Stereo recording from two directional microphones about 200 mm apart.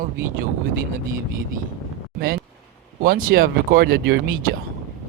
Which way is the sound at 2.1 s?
50° right (ahead or behind).